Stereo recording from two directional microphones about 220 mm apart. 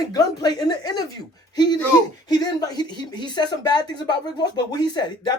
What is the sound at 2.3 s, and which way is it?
Speech, 20° left (ahead or behind).